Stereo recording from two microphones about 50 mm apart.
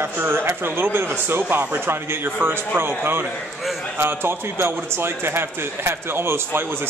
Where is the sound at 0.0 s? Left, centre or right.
Right.